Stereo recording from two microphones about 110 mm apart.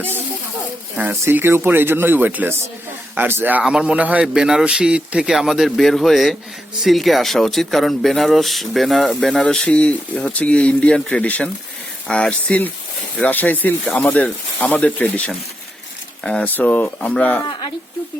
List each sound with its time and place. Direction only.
1.2 s a man's voice: 20° right (ahead or behind)
3.6 s a man's voice: 5° right (ahead or behind); by 15.2 s 15° left (ahead or behind)
16.2 s speech: 10° left (ahead or behind)